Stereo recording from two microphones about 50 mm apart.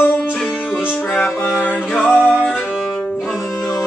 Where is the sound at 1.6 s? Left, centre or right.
Left.